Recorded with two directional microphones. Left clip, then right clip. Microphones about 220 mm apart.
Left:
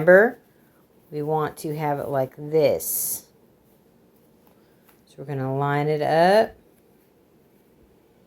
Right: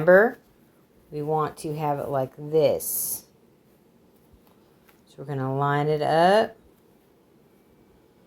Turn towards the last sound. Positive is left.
turn(degrees=5)  # may be behind; listen again after turning